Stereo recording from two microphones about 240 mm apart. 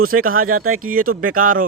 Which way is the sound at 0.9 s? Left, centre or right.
Right.